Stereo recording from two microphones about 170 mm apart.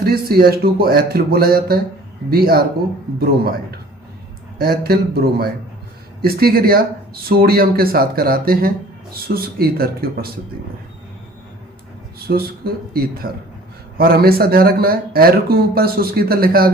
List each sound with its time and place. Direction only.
0.0 s speech: 65° right (ahead or behind)
12.3 s speech: 60° right (ahead or behind)